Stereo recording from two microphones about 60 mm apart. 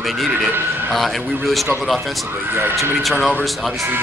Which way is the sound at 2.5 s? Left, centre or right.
Right.